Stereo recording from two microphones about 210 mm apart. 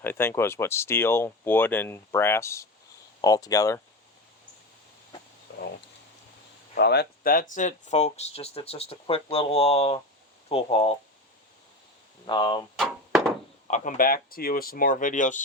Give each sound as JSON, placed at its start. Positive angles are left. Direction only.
{"t": 0.0, "sound": "speech", "side_deg": 10}
{"t": 6.7, "sound": "speech", "side_deg": 50}
{"t": 12.2, "sound": "speech", "side_deg": 20}
{"t": 12.7, "sound": "a sound", "side_deg": 0}
{"t": 13.7, "sound": "speech", "side_deg": 35}